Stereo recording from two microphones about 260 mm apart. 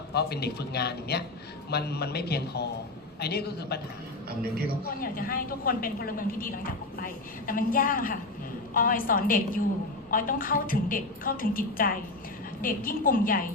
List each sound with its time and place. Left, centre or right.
0.1 s a woman's voice: left
5.0 s a woman's voice: left